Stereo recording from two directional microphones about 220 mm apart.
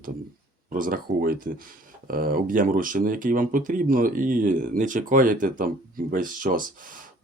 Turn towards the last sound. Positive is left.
turn(degrees=-40)  # may be behind; listen again after turning